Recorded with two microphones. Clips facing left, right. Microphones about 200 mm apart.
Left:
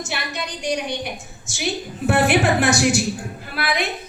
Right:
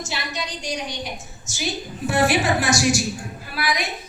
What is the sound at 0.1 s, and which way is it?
A woman's voice, 55° left (ahead or behind).